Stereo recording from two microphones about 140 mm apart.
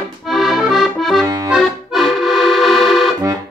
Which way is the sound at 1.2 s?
25° right (ahead or behind).